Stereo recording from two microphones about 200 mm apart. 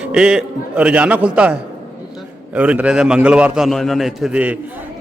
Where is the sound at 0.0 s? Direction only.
5° right (ahead or behind).